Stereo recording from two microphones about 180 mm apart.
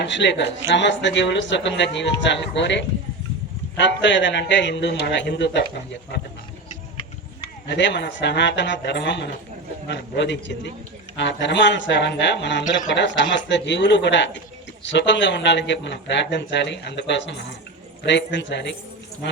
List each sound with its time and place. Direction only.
0.0 s speech: 80° left
7.7 s speech: 80° left
12.9 s speech: 90° left